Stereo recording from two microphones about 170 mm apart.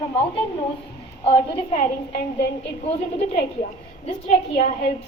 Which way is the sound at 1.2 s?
35° left (ahead or behind).